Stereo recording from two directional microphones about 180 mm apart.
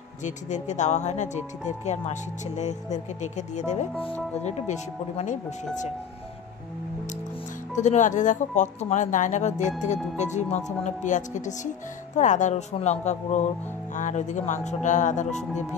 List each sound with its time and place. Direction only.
0.2 s speech: 40° left (ahead or behind)
7.7 s speech: 40° left (ahead or behind)